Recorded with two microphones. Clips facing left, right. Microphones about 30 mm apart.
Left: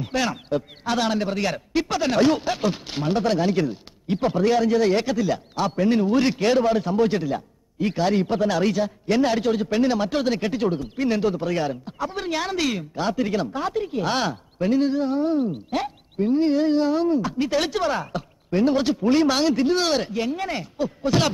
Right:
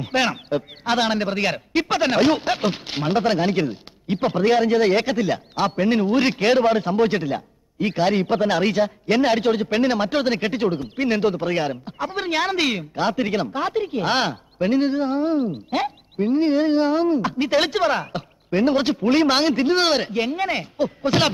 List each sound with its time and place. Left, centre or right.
0.0 s a man's voice: right